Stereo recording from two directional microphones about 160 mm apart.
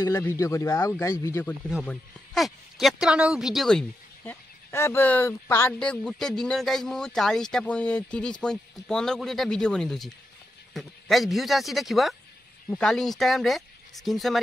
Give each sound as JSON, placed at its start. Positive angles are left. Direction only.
{"t": 0.0, "sound": "speech", "side_deg": 20}
{"t": 1.9, "sound": "speech", "side_deg": 0}
{"t": 4.3, "sound": "speech", "side_deg": 15}